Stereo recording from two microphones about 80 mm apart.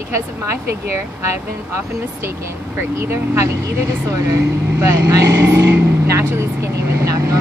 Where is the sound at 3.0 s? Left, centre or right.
Right.